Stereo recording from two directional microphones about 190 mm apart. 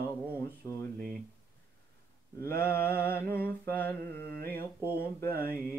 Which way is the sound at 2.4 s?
15° left (ahead or behind).